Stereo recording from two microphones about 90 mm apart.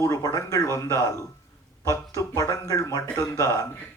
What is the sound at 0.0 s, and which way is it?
Speech, 40° left (ahead or behind).